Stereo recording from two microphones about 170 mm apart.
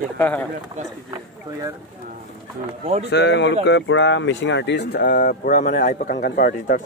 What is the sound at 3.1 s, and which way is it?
Speech, 90° left.